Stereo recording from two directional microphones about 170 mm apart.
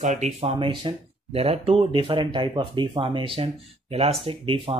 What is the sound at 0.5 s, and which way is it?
Speech, 30° right (ahead or behind).